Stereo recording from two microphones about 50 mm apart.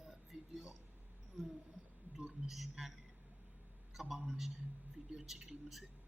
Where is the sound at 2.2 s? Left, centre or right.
Centre.